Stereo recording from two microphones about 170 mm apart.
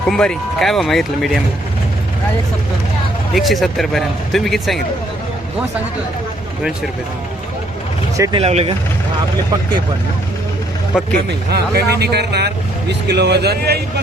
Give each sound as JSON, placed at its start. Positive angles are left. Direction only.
{"t": 0.1, "sound": "speech", "side_deg": 5}
{"t": 3.3, "sound": "speech", "side_deg": 0}
{"t": 8.1, "sound": "speech", "side_deg": -20}
{"t": 8.4, "sound": "speech", "side_deg": -35}
{"t": 10.9, "sound": "speech", "side_deg": -5}
{"t": 11.3, "sound": "speech", "side_deg": -70}